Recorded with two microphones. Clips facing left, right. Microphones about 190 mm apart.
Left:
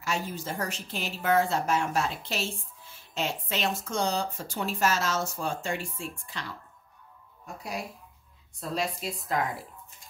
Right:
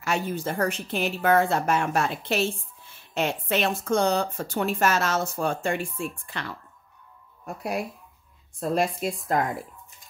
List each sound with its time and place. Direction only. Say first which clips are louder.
0.0 s speech: right 5 dB; 60° right (ahead or behind)
7.4 s a woman's voice: right 7 dB; 60° right (ahead or behind)